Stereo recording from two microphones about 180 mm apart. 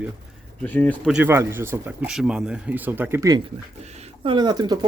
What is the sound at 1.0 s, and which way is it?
Speech, 5° right (ahead or behind).